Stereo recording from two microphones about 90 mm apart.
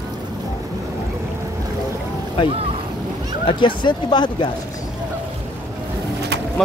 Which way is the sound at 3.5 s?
65° left (ahead or behind).